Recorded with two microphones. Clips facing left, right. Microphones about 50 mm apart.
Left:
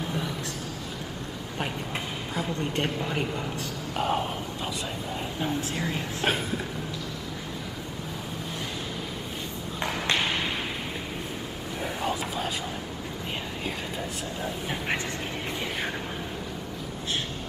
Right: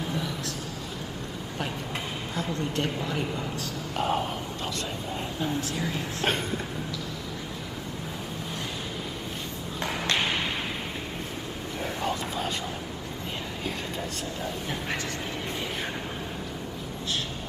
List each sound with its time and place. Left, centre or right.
2.6 s a woman's voice: left
3.9 s speech: centre
5.4 s speech: left
5.8 s a woman's voice: centre
6.2 s speech: centre
10.1 s a sound: centre
11.8 s vehicle: centre